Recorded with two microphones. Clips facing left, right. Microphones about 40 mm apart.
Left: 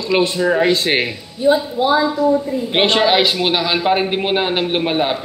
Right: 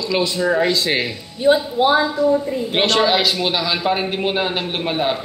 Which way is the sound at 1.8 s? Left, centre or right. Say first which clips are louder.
Even; right.